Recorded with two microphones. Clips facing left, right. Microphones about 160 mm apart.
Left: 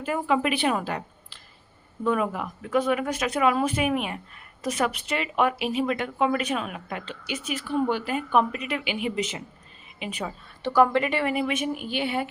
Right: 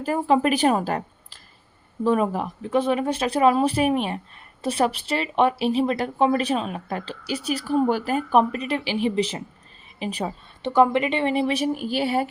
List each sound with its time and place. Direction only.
0.0 s a woman's voice: 35° right (ahead or behind)
10.6 s a woman's voice: 20° right (ahead or behind); by 12.3 s 40° right (ahead or behind)